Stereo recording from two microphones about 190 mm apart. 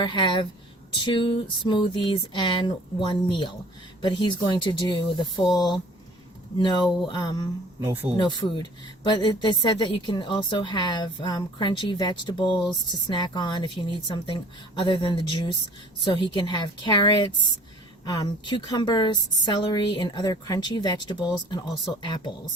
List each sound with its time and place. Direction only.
0.0 s a woman's voice: 25° left (ahead or behind)
6.6 s a woman's voice: 25° left (ahead or behind)